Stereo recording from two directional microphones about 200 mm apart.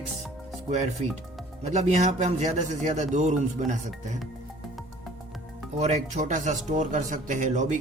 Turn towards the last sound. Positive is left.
turn(degrees=-35)  # may be behind; listen again after turning